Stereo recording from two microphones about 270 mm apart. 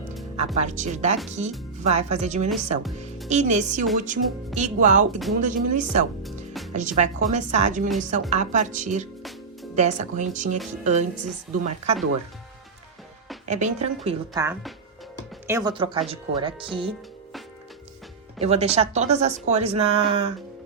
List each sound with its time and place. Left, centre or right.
0.3 s speech: right
6.2 s music: centre
6.7 s speech: right
13.4 s speech: right
14.3 s speech: centre
18.3 s speech: right